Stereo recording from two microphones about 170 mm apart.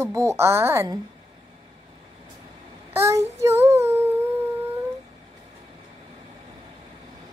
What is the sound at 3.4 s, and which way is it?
Humming, 15° right (ahead or behind).